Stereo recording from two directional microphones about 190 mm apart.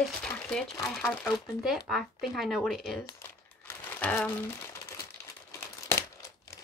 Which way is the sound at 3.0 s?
10° left (ahead or behind).